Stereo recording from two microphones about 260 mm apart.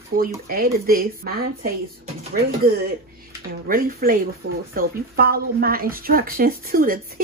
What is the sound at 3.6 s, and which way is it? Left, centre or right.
Speech, right.